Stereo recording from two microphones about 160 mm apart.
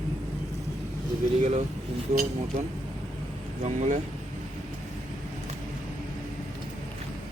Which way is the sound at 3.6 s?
45° right (ahead or behind).